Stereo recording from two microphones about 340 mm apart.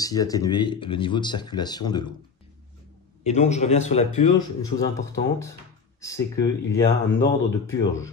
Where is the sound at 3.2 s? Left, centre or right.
Centre.